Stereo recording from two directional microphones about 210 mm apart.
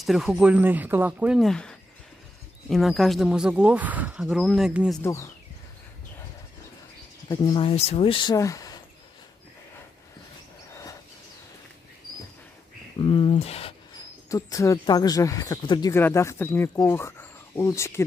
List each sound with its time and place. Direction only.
0.0 s speech: centre (ahead or behind)
5.0 s speech: 15° left (ahead or behind)
7.2 s speech: 20° left (ahead or behind)
10.7 s a sound: 15° left (ahead or behind)
13.0 s speech: 25° left (ahead or behind)
14.3 s speech: 15° left (ahead or behind)